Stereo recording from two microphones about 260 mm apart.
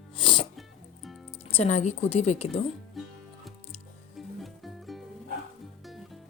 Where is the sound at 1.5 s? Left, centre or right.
Left.